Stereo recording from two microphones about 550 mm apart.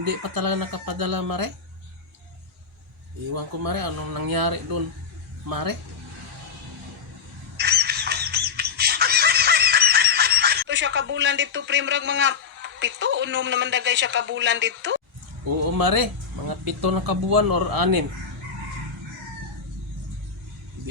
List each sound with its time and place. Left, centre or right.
0.0 s speech: right
3.3 s speech: right
7.5 s squawk: centre
15.8 s speech: right